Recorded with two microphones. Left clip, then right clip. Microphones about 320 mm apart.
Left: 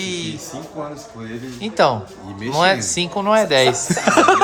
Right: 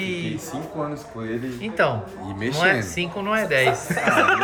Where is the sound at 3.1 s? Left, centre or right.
Centre.